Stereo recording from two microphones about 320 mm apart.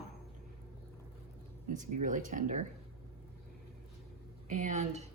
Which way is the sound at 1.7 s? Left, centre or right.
Right.